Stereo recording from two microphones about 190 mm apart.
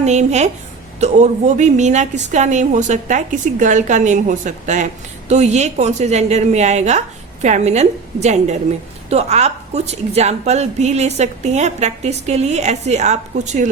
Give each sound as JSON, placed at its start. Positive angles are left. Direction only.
{"t": 0.0, "sound": "a woman's voice", "side_deg": -35}